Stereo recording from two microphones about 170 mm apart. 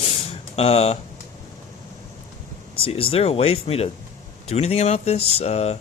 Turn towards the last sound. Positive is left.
turn(degrees=40)  # may be behind; listen again after turning